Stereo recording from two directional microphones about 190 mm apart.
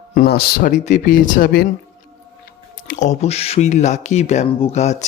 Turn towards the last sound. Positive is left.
turn(degrees=35)  # may be behind; listen again after turning